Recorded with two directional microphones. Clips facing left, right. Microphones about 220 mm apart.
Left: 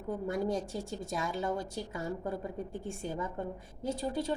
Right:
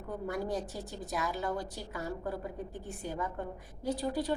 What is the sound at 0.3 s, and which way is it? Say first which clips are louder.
A woman's voice: left 2 dB; 25° left (ahead or behind).